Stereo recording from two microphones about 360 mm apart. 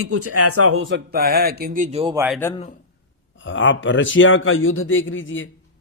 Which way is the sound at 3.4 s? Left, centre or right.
Left.